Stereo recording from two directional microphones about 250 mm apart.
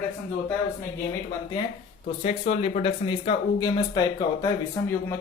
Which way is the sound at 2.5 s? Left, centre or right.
Left.